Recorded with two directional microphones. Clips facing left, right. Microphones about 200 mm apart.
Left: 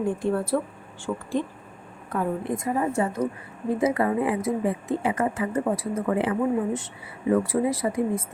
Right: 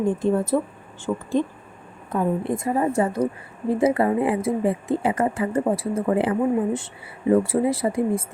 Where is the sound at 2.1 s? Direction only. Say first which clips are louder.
Right 4 dB; 25° right (ahead or behind).